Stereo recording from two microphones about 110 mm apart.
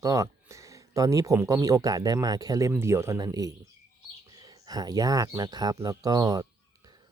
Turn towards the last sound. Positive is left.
turn(degrees=-35)  # may be behind; listen again after turning